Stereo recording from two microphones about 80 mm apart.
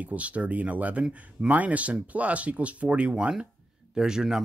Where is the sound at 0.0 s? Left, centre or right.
Centre.